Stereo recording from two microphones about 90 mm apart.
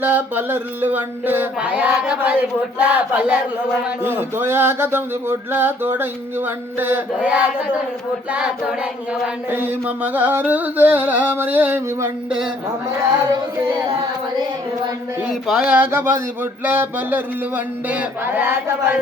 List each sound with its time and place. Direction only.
0.0 s speech: 20° right (ahead or behind)
11.9 s a sound: 30° right (ahead or behind)
15.2 s speech: 10° right (ahead or behind)
15.7 s speech: 25° right (ahead or behind)